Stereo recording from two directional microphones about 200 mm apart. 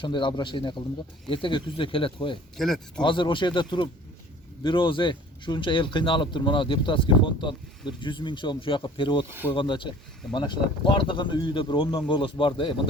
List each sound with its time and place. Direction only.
0.0 s speech: 25° left (ahead or behind)
2.6 s speech: centre (ahead or behind)
3.0 s speech: 25° left (ahead or behind)